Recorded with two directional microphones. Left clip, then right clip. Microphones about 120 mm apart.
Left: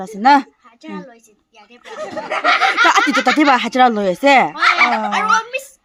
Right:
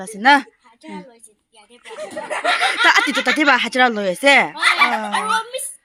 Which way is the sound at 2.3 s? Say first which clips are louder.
Left 4 dB; 90° right.